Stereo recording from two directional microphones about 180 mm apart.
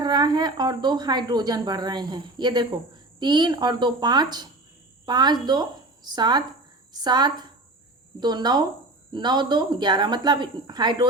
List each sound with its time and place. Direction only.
0.0 s a woman's voice: 25° right (ahead or behind)